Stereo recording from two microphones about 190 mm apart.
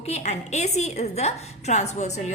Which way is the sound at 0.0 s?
35° left (ahead or behind).